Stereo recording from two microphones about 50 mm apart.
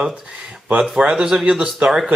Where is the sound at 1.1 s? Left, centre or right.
Centre.